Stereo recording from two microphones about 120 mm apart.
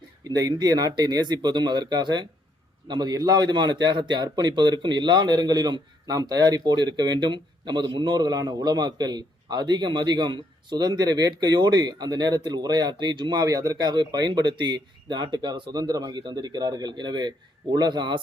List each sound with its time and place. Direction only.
0.3 s a man's voice: 35° right (ahead or behind)